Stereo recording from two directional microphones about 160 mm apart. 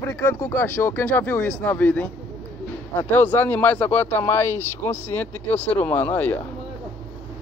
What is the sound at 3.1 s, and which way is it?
Speech, 10° left (ahead or behind).